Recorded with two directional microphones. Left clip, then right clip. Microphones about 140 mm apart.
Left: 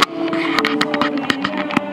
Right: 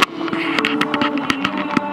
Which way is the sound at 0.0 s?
55° left (ahead or behind).